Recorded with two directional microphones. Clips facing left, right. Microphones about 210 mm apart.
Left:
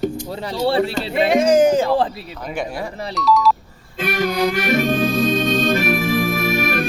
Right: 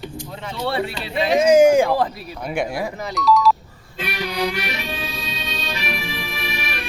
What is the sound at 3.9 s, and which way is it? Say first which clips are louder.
Music: left 6 dB; 50° left (ahead or behind).